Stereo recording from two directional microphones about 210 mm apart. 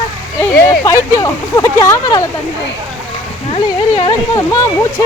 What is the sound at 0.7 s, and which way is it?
Speech, 15° left (ahead or behind).